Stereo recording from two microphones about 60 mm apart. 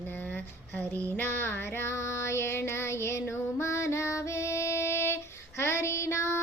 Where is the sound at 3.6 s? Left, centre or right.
Left.